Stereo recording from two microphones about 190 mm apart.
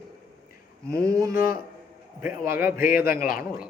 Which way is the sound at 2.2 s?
50° left (ahead or behind).